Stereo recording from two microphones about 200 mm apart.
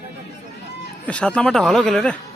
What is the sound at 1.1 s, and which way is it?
Speech, 5° left (ahead or behind).